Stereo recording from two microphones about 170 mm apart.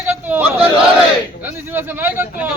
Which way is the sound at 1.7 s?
10° right (ahead or behind).